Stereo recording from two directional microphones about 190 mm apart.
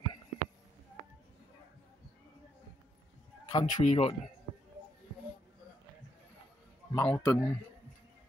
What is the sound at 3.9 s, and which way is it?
Speech, 35° left (ahead or behind).